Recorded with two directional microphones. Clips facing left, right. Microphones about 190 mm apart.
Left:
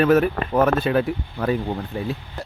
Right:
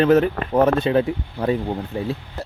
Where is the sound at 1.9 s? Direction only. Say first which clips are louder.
Right 2 dB; 30° right (ahead or behind).